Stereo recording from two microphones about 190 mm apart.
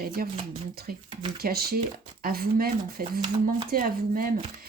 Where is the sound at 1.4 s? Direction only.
55° right (ahead or behind).